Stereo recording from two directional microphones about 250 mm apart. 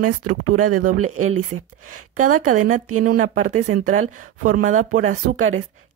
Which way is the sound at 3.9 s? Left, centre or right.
Right.